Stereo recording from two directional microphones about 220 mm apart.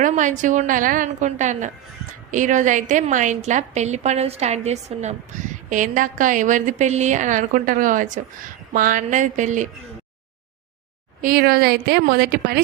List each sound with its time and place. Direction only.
0.0 s a woman's voice: 35° right (ahead or behind)
11.2 s a woman's voice: 40° right (ahead or behind)